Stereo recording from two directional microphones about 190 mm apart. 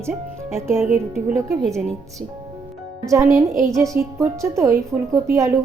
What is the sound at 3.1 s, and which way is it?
A woman's voice, 15° right (ahead or behind).